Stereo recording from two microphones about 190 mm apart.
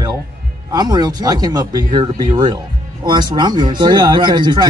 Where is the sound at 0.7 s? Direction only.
20° right (ahead or behind).